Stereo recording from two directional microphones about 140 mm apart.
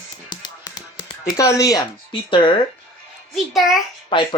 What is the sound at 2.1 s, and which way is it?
Speech, 35° left (ahead or behind).